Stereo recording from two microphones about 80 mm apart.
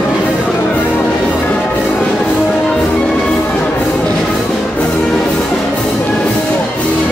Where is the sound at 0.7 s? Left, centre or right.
Left.